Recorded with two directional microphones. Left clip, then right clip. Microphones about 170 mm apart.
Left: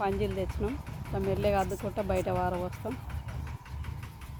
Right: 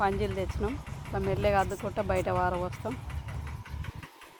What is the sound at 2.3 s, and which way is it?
Speech, 10° left (ahead or behind).